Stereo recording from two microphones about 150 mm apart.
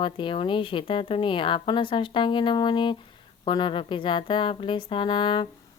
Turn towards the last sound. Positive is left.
turn(degrees=30)  # may be behind; listen again after turning